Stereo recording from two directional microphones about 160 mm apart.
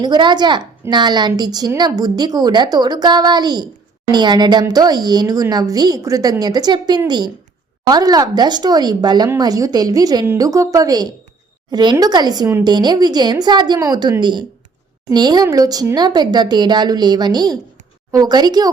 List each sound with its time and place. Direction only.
0.0 s a woman's voice: 30° right (ahead or behind)